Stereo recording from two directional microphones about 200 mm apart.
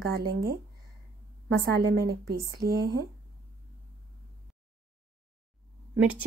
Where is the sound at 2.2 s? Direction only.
50° right (ahead or behind).